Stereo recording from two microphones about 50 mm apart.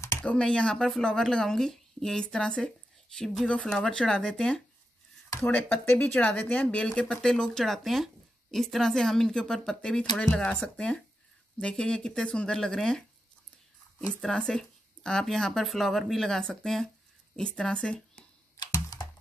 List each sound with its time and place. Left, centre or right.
0.4 s speech: centre
5.4 s speech: left; by 9.8 s centre
9.8 s speech: left
14.2 s speech: centre